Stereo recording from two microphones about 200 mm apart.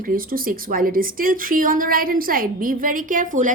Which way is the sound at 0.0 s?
45° right (ahead or behind).